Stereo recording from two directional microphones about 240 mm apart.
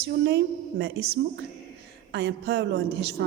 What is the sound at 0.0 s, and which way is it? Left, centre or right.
A woman's voice, right.